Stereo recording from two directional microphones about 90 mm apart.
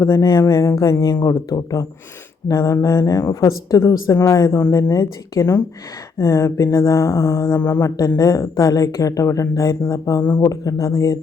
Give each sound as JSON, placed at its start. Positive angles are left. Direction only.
{"t": 0.0, "sound": "speech", "side_deg": 40}